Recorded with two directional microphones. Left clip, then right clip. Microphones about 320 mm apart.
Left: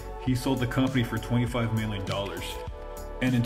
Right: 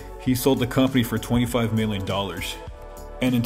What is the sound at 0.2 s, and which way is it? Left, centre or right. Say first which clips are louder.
Speech: right 7 dB; right.